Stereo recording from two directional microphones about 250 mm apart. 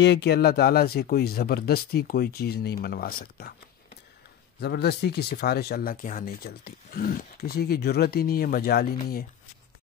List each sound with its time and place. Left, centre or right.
0.0 s speech: left
4.6 s speech: left